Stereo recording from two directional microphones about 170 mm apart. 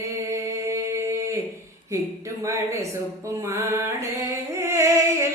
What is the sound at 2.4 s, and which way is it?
Speech, 20° right (ahead or behind).